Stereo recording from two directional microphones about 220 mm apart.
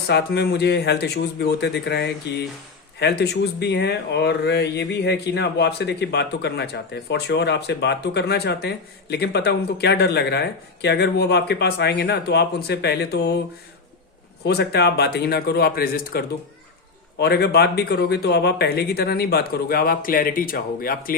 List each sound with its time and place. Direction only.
0.1 s speech: 50° left (ahead or behind)
14.4 s speech: 50° left (ahead or behind)